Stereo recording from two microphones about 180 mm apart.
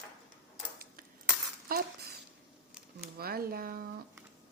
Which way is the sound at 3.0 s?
60° right (ahead or behind).